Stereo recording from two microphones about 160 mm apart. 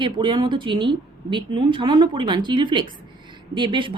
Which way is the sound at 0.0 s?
30° right (ahead or behind).